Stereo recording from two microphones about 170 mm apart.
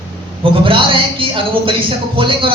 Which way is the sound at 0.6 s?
30° right (ahead or behind).